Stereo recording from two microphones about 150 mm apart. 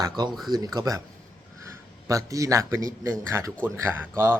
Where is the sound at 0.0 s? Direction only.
30° right (ahead or behind).